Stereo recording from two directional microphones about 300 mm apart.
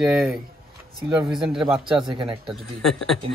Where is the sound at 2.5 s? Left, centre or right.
Centre.